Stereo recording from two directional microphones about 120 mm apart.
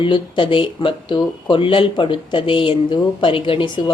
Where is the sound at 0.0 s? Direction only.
45° left (ahead or behind).